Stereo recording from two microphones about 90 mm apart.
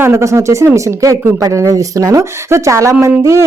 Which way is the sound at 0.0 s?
30° right (ahead or behind).